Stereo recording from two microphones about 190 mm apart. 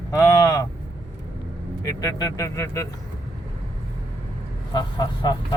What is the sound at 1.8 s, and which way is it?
Speech, 20° left (ahead or behind).